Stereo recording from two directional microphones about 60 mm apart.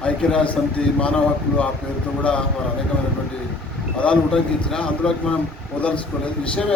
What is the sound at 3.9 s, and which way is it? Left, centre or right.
Speech, centre.